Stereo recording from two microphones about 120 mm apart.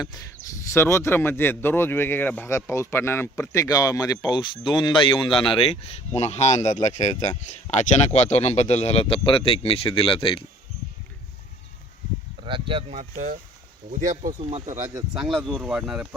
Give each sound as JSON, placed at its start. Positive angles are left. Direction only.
{"t": 0.0, "sound": "speech", "side_deg": 30}
{"t": 12.5, "sound": "speech", "side_deg": -45}
{"t": 12.9, "sound": "speech", "side_deg": -75}
{"t": 15.2, "sound": "speech", "side_deg": 0}